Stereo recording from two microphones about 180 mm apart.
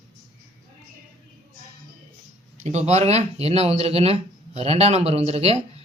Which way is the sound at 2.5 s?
40° right (ahead or behind).